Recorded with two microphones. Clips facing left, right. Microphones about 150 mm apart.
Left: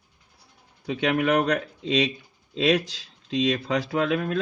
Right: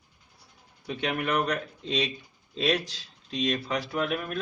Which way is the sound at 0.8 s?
90° left.